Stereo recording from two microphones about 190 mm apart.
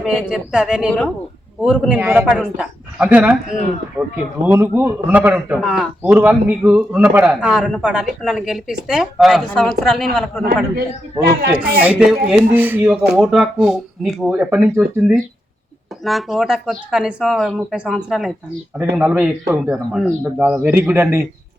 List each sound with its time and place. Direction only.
0.0 s a man's voice: 5° right (ahead or behind)
4.4 s a man's voice: 10° right (ahead or behind)
10.4 s a man's voice: 55° right (ahead or behind)
11.5 s a man's voice: 10° right (ahead or behind)